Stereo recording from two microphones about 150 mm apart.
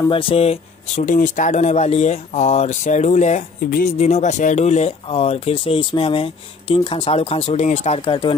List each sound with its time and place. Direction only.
0.1 s speech: 35° left (ahead or behind)
1.0 s speech: 60° left (ahead or behind); by 8.4 s 35° left (ahead or behind)